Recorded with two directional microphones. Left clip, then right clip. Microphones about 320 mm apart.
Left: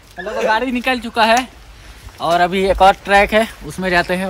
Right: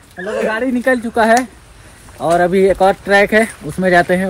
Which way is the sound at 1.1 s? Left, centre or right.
Centre.